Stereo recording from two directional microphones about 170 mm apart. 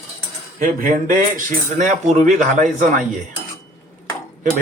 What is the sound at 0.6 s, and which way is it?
Speech, 55° right (ahead or behind).